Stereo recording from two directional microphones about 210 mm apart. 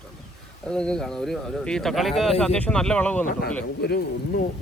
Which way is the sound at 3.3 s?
45° left (ahead or behind).